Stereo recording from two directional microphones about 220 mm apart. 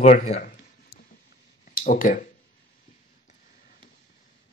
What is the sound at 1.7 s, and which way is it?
Speech, 40° left (ahead or behind).